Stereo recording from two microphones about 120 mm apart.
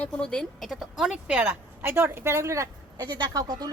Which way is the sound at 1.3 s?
15° right (ahead or behind).